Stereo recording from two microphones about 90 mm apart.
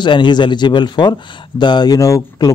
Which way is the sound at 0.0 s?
60° left (ahead or behind).